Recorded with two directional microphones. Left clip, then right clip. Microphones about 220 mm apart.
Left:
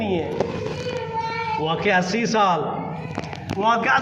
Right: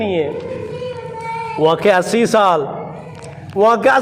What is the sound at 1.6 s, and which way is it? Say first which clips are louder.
Speech: right 10 dB; 60° right (ahead or behind).